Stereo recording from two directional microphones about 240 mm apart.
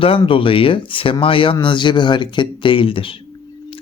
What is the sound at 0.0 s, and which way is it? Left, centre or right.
Speech, left.